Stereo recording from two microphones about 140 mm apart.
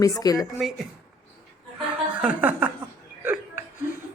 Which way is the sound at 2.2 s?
10° right (ahead or behind).